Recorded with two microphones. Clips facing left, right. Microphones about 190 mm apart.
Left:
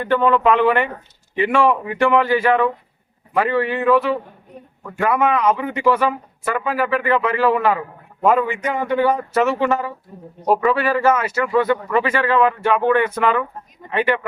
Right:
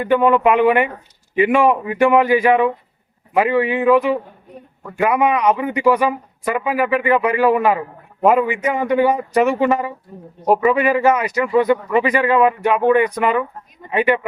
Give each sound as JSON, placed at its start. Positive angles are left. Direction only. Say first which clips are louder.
{"t": 0.0, "sound": "speech", "louder": "right 2 dB", "side_deg": -10}